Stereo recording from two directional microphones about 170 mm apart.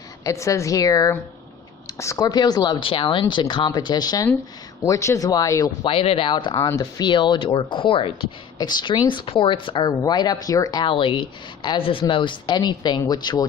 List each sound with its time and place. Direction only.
0.3 s a woman's voice: 20° left (ahead or behind)